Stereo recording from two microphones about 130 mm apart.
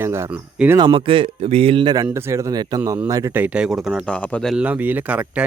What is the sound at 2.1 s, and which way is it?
Speech, 20° right (ahead or behind).